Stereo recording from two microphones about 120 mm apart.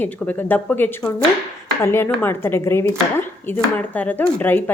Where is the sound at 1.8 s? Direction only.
20° left (ahead or behind).